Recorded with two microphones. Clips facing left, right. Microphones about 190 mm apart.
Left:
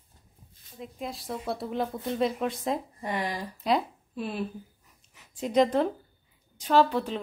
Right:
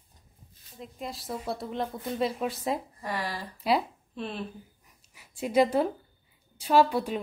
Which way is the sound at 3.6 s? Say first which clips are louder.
Even; 5° right (ahead or behind).